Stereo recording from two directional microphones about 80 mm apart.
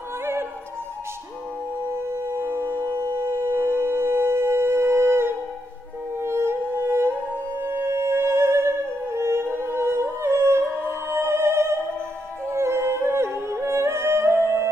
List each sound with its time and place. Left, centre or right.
0.2 s music: right
1.9 s music: right